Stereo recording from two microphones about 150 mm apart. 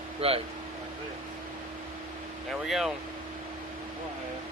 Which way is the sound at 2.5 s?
Centre (ahead or behind).